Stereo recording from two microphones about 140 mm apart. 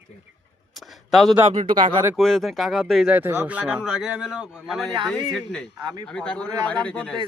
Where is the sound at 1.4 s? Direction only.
60° right (ahead or behind).